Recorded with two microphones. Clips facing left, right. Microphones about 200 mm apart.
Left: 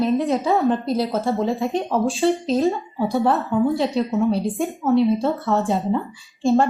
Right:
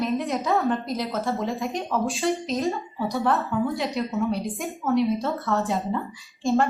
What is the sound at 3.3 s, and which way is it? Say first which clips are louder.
Speech: left 5 dB; centre (ahead or behind).